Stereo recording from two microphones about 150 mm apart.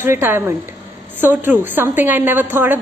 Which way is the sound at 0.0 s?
15° right (ahead or behind).